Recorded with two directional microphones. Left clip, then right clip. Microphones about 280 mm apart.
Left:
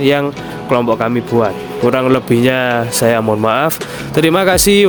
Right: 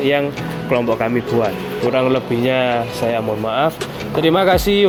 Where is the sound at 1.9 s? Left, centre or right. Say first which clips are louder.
Left 4 dB; left.